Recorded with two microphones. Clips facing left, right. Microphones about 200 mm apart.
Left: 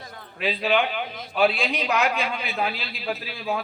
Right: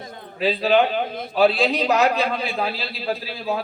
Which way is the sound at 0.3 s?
35° right (ahead or behind).